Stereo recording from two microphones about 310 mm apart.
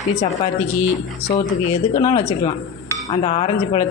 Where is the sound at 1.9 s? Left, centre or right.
Centre.